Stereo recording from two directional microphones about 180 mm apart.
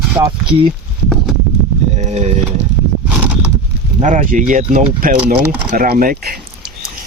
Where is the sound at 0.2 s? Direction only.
25° right (ahead or behind).